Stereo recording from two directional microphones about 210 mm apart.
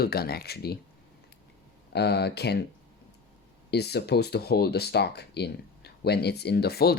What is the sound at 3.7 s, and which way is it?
Speech, 50° left (ahead or behind).